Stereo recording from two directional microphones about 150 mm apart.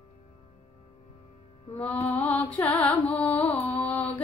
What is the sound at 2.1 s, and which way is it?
Music, 10° left (ahead or behind).